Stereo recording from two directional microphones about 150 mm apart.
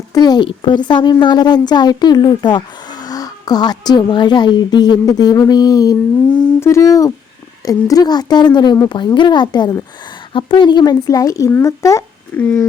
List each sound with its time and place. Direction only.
0.1 s a child's voice: 25° left (ahead or behind)